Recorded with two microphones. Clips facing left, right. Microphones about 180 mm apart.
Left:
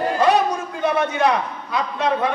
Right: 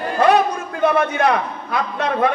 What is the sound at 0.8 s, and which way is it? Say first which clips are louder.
A man's voice: right 3 dB; 55° right (ahead or behind).